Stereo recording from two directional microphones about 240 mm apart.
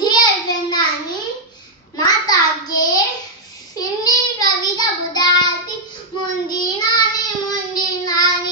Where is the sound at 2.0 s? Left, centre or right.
Centre.